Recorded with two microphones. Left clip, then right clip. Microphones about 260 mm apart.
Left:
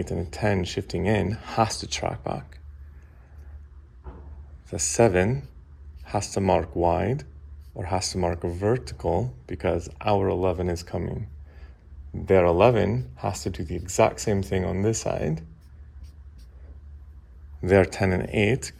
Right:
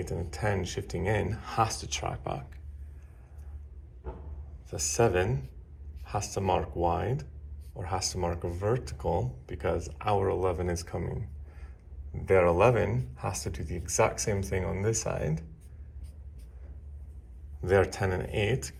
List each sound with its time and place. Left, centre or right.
0.2 s speech: left
4.9 s speech: left
17.6 s speech: left